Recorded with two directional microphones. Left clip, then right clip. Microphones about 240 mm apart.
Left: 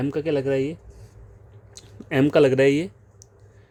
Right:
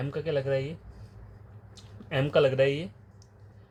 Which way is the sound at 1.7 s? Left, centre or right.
Left.